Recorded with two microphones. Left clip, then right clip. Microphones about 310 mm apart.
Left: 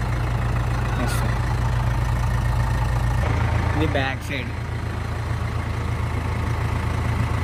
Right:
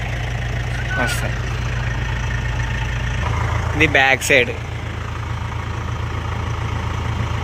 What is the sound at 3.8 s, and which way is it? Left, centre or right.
Speech, centre.